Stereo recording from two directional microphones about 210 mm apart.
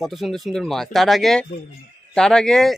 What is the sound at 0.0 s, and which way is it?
Speech, centre (ahead or behind).